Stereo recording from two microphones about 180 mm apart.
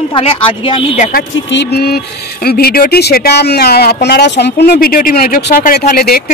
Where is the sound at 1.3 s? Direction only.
85° left.